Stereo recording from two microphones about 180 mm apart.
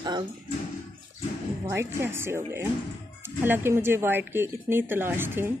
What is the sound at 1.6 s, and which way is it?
Speech, 15° right (ahead or behind).